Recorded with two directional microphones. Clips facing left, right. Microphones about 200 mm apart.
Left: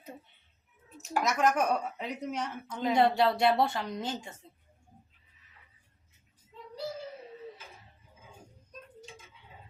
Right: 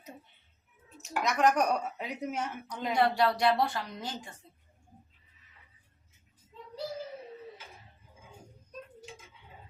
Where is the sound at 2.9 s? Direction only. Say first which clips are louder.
Left 2 dB; 25° left (ahead or behind).